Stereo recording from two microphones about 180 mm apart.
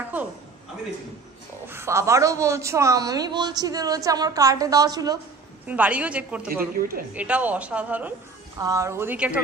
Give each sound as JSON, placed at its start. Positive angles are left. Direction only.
{"t": 1.7, "sound": "a man's voice", "side_deg": -15}
{"t": 5.7, "sound": "speech", "side_deg": -10}
{"t": 6.8, "sound": "a woman's voice", "side_deg": -50}
{"t": 7.2, "sound": "speech", "side_deg": -10}